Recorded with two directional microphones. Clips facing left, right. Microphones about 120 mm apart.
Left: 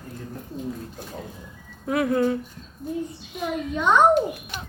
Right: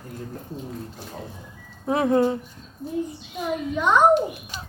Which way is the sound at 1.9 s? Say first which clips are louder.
Right 2 dB; 25° right (ahead or behind).